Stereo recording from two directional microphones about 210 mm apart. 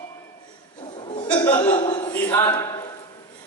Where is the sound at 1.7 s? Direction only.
20° left (ahead or behind).